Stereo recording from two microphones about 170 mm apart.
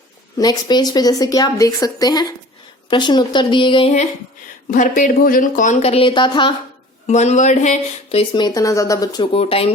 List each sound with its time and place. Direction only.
0.3 s a woman's voice: 25° left (ahead or behind)
4.7 s speech: 50° left (ahead or behind); by 6.6 s 30° left (ahead or behind)
7.1 s speech: 45° left (ahead or behind); by 9.2 s 20° left (ahead or behind)
9.2 s speech: 35° left (ahead or behind)